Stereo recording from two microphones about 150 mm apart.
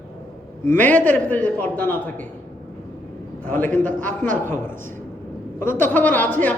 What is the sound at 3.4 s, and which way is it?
Speech, 10° left (ahead or behind).